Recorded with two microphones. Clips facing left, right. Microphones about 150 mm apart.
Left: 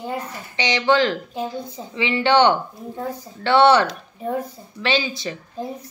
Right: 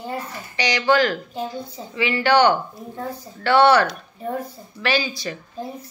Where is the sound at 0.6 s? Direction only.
20° left (ahead or behind).